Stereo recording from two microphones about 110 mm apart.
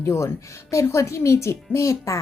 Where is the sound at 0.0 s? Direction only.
25° left (ahead or behind).